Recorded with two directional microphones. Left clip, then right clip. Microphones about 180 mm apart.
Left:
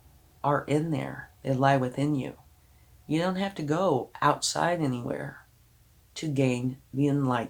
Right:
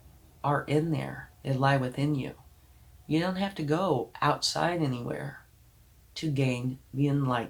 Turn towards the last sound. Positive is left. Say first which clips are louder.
# left 2 dB
turn(degrees=50)  # may be behind; listen again after turning